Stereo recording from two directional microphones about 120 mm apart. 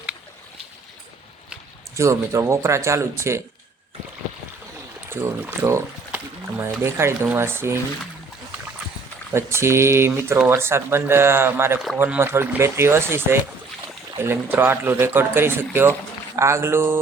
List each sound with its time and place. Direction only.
2.0 s speech: 25° right (ahead or behind)
5.0 s speech: 20° right (ahead or behind)
9.3 s speech: 20° right (ahead or behind)
14.5 s speech: 20° right (ahead or behind)